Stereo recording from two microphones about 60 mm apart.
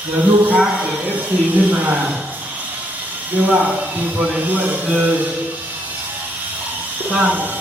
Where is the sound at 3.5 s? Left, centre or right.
Right.